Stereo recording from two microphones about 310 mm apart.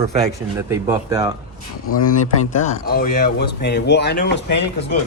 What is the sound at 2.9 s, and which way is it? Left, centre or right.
Speech, left.